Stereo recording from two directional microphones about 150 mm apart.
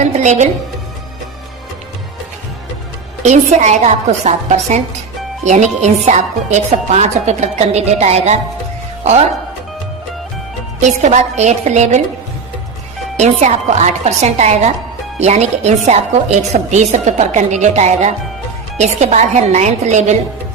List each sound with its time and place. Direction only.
0.0 s a woman's voice: 50° right (ahead or behind)
3.2 s a woman's voice: 50° right (ahead or behind)
10.8 s a woman's voice: 50° right (ahead or behind)
13.1 s a woman's voice: 50° right (ahead or behind)